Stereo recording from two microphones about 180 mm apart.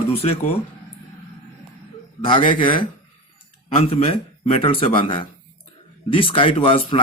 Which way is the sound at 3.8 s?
30° left (ahead or behind).